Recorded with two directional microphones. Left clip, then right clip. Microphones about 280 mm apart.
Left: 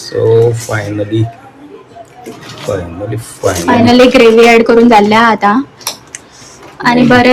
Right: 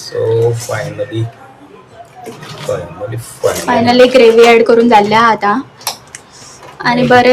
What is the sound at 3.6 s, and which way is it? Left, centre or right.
Speech, centre.